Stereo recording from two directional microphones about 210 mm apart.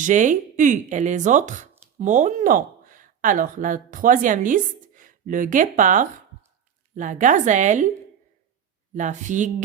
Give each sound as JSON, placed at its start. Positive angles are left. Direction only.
{"t": 0.0, "sound": "speech", "side_deg": -35}
{"t": 9.0, "sound": "speech", "side_deg": -35}